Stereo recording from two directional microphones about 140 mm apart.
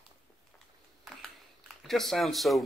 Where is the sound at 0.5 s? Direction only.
Centre (ahead or behind).